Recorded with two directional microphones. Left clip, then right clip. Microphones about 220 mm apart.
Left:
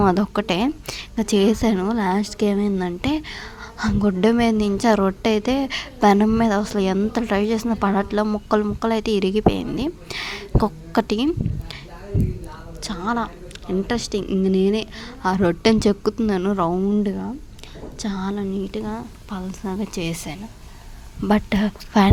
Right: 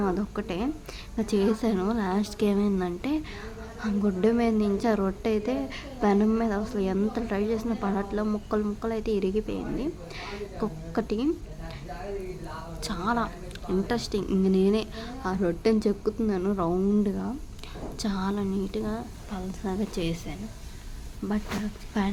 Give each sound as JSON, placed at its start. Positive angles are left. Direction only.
{"t": 0.0, "sound": "a woman's voice", "side_deg": 40}
{"t": 12.8, "sound": "a woman's voice", "side_deg": 20}
{"t": 16.9, "sound": "a woman's voice", "side_deg": 20}